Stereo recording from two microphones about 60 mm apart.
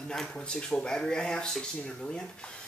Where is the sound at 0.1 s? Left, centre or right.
Centre.